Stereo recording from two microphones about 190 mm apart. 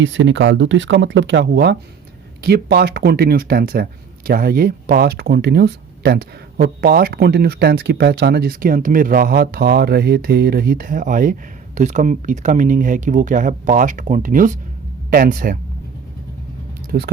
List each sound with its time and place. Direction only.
0.0 s speech: 80° right; by 15.5 s 45° right (ahead or behind)
16.9 s speech: 50° right (ahead or behind)